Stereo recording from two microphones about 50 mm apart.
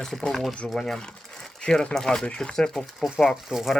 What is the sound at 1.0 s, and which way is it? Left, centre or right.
Speech, centre.